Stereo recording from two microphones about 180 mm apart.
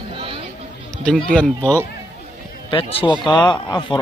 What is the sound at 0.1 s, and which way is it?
Chatter, 30° right (ahead or behind).